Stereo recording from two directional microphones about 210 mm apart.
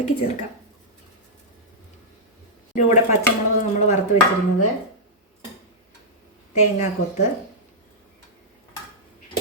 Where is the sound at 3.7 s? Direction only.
35° left (ahead or behind).